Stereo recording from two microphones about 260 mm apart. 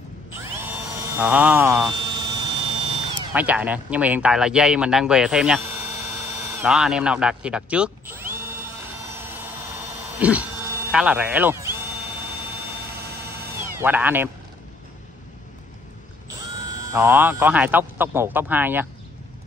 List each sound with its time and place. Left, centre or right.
0.4 s drill: centre
2.0 s hum: centre
3.3 s speech: centre
9.2 s vehicle: centre
9.9 s a sound: centre
13.6 s speech: centre
16.9 s speech: centre